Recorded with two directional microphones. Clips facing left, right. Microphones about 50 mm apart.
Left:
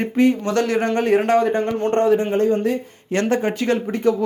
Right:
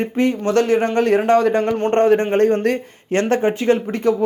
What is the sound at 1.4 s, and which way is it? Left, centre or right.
Speech, right.